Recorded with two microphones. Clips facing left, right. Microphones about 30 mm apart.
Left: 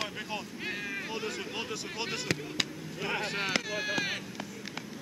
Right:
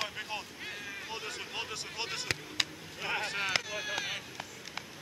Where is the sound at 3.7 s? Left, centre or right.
Centre.